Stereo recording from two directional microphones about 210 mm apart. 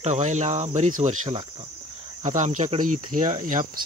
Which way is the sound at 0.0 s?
35° right (ahead or behind).